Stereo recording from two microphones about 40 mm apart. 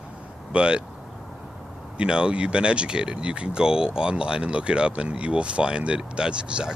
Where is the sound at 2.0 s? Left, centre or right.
Right.